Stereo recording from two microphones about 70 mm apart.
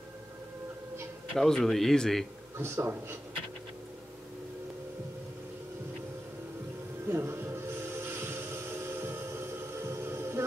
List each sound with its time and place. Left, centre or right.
1.3 s a man's voice: centre
2.5 s a man's voice: right
7.1 s train: right